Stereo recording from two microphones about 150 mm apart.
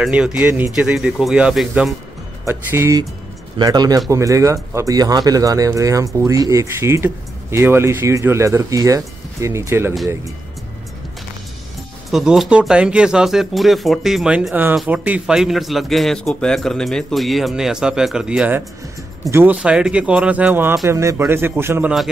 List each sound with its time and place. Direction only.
0.0 s speech: 5° right (ahead or behind)
2.4 s speech: 15° right (ahead or behind)
12.1 s speech: centre (ahead or behind)